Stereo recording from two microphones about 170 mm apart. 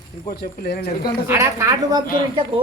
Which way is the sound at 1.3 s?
15° right (ahead or behind).